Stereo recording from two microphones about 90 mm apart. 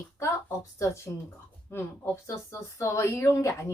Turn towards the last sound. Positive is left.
turn(degrees=35)  # may be behind; listen again after turning